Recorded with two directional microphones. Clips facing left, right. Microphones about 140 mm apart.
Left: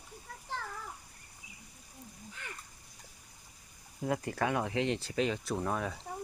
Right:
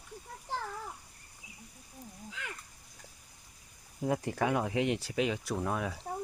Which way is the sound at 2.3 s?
90° right.